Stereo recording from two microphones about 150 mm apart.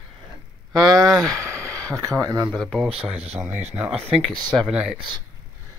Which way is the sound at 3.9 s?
40° right (ahead or behind).